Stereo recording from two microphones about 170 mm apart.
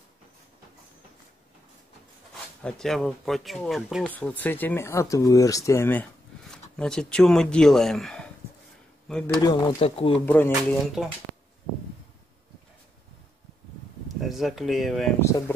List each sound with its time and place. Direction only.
2.6 s speech: 5° left (ahead or behind)
9.4 s speech: 20° left (ahead or behind)
9.8 s speech: 35° left (ahead or behind)
10.2 s speech: 10° left (ahead or behind)
14.2 s speech: centre (ahead or behind)
15.1 s speech: 15° left (ahead or behind)